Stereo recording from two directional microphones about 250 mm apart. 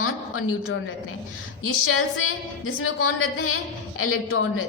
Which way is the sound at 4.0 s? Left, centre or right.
Left.